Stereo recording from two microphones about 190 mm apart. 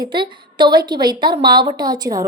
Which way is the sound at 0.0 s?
25° right (ahead or behind).